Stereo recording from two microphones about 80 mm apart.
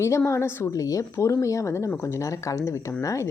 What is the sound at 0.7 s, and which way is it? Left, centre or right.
Speech, left.